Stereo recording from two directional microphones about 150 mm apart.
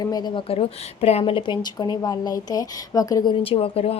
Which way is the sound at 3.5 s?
40° left (ahead or behind).